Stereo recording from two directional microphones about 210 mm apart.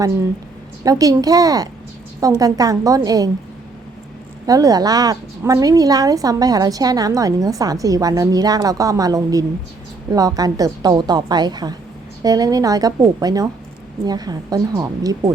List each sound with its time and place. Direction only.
0.9 s a woman's voice: 15° right (ahead or behind)
4.4 s a woman's voice: 15° right (ahead or behind)